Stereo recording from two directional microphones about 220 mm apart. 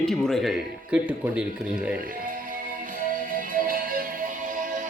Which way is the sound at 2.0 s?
40° right (ahead or behind).